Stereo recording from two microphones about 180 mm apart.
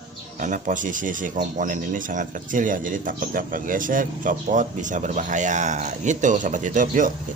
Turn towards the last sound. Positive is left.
turn(degrees=-45)  # may be behind; listen again after turning